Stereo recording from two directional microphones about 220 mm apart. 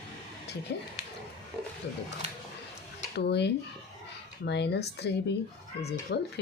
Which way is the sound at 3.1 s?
50° left (ahead or behind).